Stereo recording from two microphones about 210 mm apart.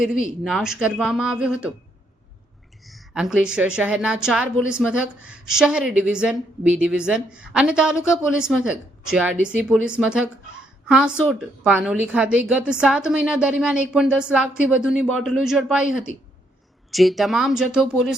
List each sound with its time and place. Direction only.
0.4 s a woman's voice: centre (ahead or behind)
2.8 s a woman's voice: centre (ahead or behind)